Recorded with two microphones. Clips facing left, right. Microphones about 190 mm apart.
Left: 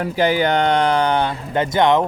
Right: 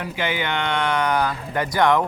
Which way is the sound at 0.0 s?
40° left (ahead or behind).